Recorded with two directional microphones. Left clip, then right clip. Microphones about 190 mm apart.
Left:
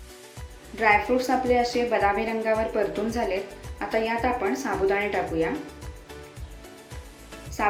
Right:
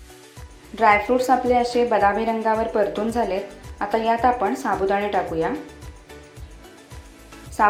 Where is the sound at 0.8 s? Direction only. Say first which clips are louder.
Right 4 dB; 15° right (ahead or behind).